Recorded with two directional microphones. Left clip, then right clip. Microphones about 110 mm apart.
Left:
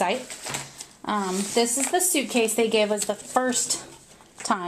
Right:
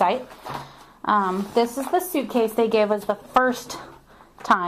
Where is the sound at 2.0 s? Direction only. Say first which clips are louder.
Right 2 dB; 10° left (ahead or behind).